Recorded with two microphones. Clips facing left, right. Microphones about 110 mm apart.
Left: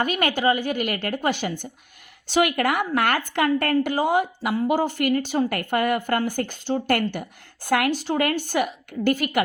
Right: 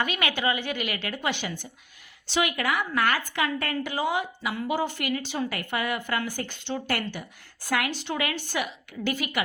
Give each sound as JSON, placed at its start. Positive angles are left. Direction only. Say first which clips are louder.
{"t": 0.0, "sound": "a woman's voice", "louder": "left 5 dB", "side_deg": 45}